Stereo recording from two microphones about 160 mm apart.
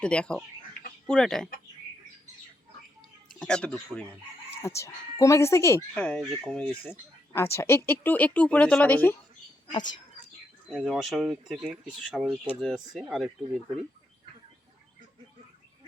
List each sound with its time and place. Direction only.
0.0 s speech: 5° left (ahead or behind)
3.3 s speech: 5° left (ahead or behind)
4.5 s speech: 15° left (ahead or behind)
5.9 s speech: 5° left (ahead or behind)
9.7 s speech: 25° left (ahead or behind)
10.7 s speech: centre (ahead or behind)